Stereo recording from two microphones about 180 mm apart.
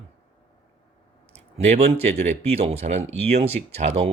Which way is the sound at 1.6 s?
35° right (ahead or behind).